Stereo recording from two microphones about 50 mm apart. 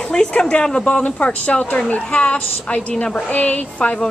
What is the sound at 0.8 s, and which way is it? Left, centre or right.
A woman's voice, left.